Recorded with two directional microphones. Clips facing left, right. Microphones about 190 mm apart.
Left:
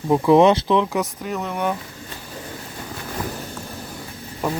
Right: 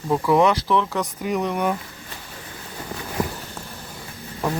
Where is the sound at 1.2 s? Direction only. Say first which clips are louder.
Right 2 dB; 15° right (ahead or behind).